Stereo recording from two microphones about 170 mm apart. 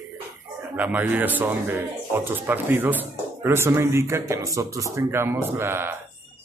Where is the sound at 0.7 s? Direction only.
10° right (ahead or behind).